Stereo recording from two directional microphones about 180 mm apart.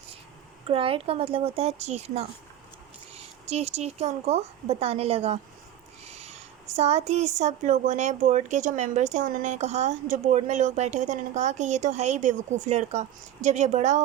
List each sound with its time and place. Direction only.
0.7 s a woman's voice: 30° right (ahead or behind)